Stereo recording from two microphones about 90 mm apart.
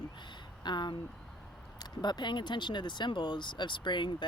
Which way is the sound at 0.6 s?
55° left (ahead or behind).